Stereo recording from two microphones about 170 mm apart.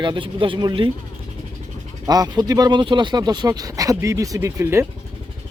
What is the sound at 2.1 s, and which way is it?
Speech, 25° right (ahead or behind).